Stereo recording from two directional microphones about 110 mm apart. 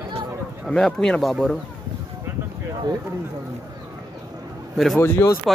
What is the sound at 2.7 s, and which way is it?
Speech, 40° right (ahead or behind).